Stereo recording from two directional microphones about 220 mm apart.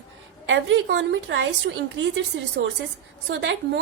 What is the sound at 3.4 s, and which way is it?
Speech, 55° right (ahead or behind).